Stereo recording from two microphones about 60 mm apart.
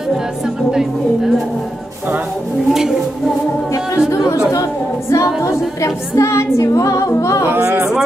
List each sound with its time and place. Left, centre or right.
0.7 s a woman's voice: centre
2.7 s a woman's voice: centre
5.1 s female singing: left
7.4 s speech: right